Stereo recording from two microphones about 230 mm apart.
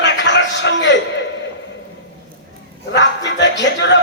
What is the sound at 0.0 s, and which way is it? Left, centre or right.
Music, left.